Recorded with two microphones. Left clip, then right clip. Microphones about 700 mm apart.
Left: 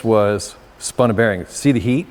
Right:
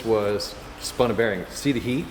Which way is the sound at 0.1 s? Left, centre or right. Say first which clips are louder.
Left 7 dB; left.